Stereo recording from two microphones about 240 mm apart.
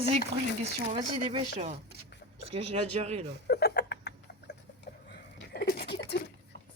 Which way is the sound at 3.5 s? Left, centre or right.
Left.